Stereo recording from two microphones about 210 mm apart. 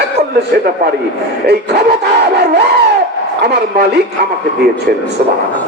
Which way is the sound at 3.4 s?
50° right (ahead or behind).